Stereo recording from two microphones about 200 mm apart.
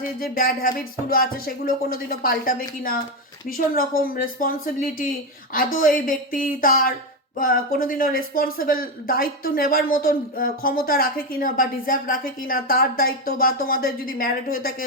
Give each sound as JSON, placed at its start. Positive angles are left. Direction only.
{"t": 0.2, "sound": "speech", "side_deg": 45}